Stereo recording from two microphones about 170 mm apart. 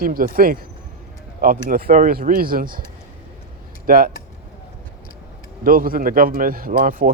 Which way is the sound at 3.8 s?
55° right (ahead or behind).